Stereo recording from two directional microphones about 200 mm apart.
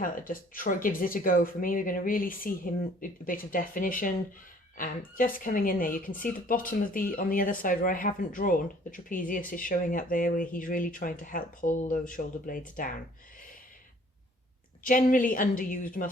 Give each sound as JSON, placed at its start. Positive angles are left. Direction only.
{"t": 0.0, "sound": "speech", "side_deg": 45}
{"t": 14.8, "sound": "speech", "side_deg": 40}